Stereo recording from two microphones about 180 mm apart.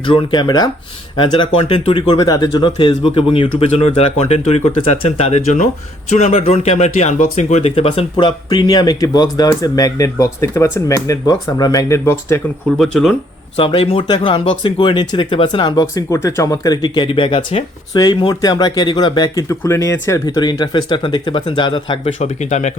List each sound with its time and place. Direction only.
0.0 s speech: 30° left (ahead or behind)
12.7 s speech: centre (ahead or behind)
13.6 s speech: 30° left (ahead or behind)